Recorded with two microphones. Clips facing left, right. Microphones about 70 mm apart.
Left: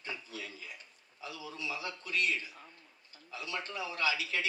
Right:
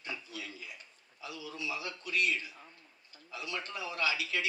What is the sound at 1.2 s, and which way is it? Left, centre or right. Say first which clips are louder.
A man's voice: right 1 dB; left.